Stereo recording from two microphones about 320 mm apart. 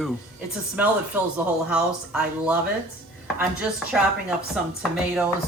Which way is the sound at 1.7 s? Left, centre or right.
Centre.